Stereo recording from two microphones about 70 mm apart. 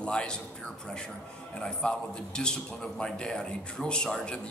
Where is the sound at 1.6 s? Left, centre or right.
Centre.